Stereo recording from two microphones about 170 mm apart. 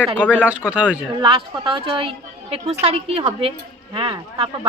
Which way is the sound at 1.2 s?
30° right (ahead or behind).